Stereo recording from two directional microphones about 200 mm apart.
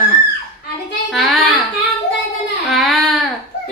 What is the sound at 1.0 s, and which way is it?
Speech, centre (ahead or behind).